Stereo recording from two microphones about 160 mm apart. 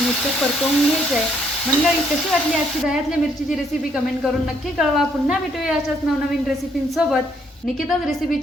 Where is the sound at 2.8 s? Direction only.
5° right (ahead or behind).